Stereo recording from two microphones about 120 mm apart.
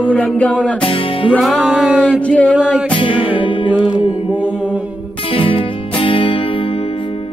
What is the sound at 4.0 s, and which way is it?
Mantra, 45° left (ahead or behind).